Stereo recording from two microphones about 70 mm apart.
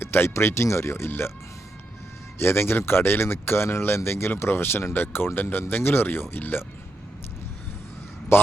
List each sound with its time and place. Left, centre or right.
0.0 s speech: left
2.4 s speech: left
8.3 s speech: left